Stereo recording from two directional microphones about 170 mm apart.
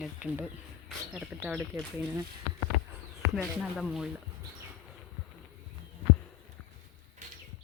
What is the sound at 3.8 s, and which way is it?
Speech, centre (ahead or behind).